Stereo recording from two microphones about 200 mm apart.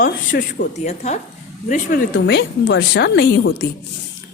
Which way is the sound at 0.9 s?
35° left (ahead or behind).